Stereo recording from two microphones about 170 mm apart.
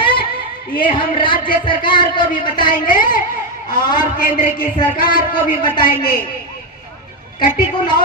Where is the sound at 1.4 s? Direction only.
55° left (ahead or behind).